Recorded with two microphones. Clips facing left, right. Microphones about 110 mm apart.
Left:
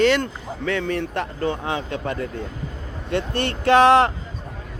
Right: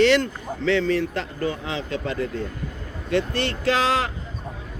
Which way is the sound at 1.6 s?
50° left (ahead or behind).